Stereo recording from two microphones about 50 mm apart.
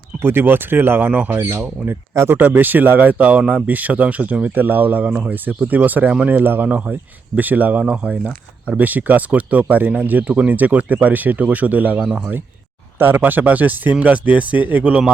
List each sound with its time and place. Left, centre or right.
0.2 s speech: right
6.7 s speech: right
6.9 s speech: right
8.8 s speech: right
14.8 s speech: centre